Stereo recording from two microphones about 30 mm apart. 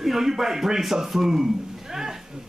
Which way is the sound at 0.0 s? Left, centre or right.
Centre.